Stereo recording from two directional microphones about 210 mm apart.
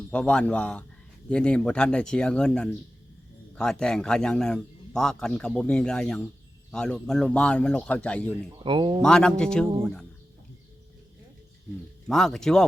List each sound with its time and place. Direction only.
0.1 s a man's voice: 5° left (ahead or behind)
8.6 s speech: 25° right (ahead or behind)
9.0 s a man's voice: 5° left (ahead or behind)
12.0 s a man's voice: centre (ahead or behind)